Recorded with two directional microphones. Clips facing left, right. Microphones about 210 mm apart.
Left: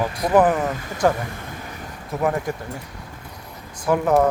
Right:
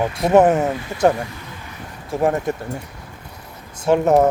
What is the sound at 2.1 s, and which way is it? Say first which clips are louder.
Speech: right 4 dB; 25° right (ahead or behind).